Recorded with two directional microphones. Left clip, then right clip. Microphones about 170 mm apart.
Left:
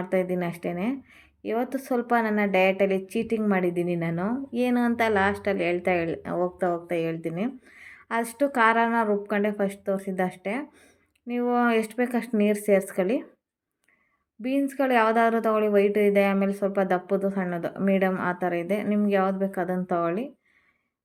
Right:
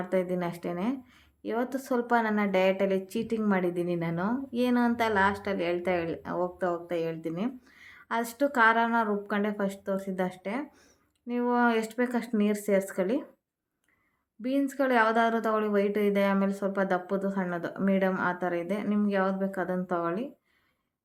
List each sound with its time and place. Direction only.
0.0 s a woman's voice: 15° left (ahead or behind)
14.4 s a woman's voice: 15° left (ahead or behind)